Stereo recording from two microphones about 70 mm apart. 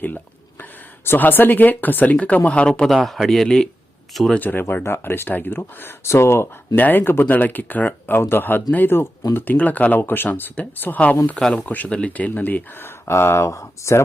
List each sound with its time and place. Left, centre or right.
1.0 s speech: left; by 2.9 s centre
2.9 s speech: centre
4.4 s speech: left
6.7 s speech: left
13.1 s speech: left